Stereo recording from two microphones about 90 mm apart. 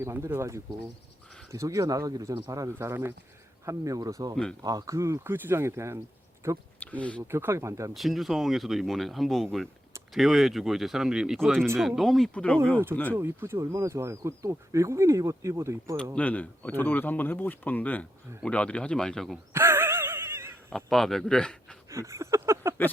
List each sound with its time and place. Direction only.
0.0 s speech: 30° right (ahead or behind)
2.7 s speech: 30° right (ahead or behind)
3.7 s speech: 40° right (ahead or behind)
6.7 s a sound: 15° left (ahead or behind)
7.3 s speech: 30° right (ahead or behind)
7.9 s speech: centre (ahead or behind)
12.3 s speech: 15° left (ahead or behind)
13.1 s speech: 25° right (ahead or behind)
16.1 s speech: 15° left (ahead or behind)
19.5 s a sound: 25° right (ahead or behind)
20.7 s speech: 5° left (ahead or behind)
21.8 s speech: 35° right (ahead or behind)